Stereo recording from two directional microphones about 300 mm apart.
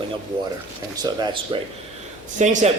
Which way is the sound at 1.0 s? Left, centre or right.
Centre.